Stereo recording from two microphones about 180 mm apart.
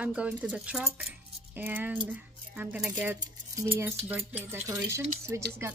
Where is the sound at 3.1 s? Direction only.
20° right (ahead or behind).